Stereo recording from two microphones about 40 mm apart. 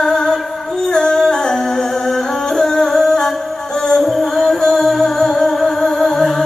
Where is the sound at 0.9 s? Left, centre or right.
Centre.